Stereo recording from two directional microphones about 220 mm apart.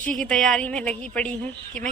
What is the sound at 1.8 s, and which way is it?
Speech, 35° right (ahead or behind).